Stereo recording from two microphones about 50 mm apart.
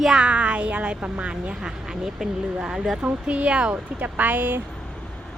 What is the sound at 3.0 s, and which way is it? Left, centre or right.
Speech, right.